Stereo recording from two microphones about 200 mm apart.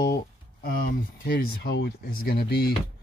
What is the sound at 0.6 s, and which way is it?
Speech, 50° left (ahead or behind).